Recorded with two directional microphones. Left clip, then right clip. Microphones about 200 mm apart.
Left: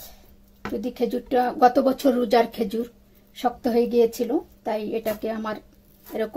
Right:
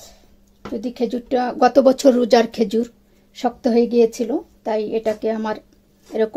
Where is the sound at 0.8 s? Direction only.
25° right (ahead or behind).